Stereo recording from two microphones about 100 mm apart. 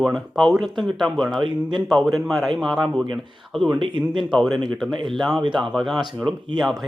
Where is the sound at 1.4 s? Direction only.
50° right (ahead or behind).